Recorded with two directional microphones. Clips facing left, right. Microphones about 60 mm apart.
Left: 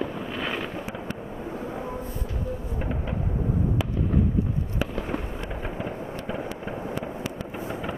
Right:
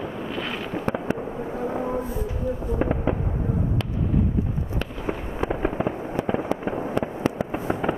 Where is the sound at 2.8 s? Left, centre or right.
Right.